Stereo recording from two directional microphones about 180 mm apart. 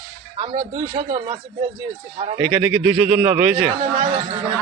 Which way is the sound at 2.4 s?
10° right (ahead or behind).